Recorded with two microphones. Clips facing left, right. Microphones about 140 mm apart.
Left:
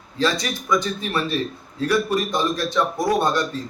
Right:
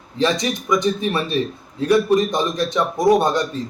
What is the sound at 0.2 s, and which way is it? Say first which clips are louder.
Speech: right 3 dB; 20° right (ahead or behind).